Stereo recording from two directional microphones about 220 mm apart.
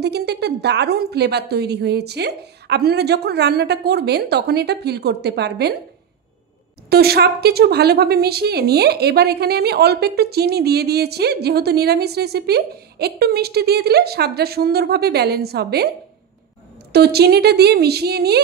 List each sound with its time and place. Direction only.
0.0 s a woman's voice: 50° right (ahead or behind)
6.9 s a woman's voice: 45° right (ahead or behind)
16.9 s a woman's voice: 45° right (ahead or behind)